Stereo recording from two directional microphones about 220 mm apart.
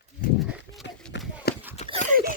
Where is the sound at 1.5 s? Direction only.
45° left (ahead or behind).